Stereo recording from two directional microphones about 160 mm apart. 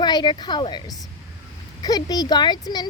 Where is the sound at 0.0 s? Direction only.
30° left (ahead or behind).